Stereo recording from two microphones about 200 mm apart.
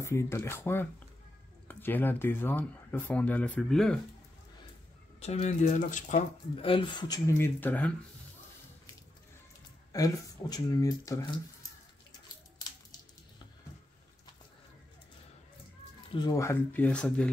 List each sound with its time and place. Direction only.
0.0 s speech: 15° left (ahead or behind)
5.2 s speech: 35° left (ahead or behind); by 7.9 s 10° left (ahead or behind)
9.9 s speech: 20° left (ahead or behind)
16.2 s speech: 15° left (ahead or behind)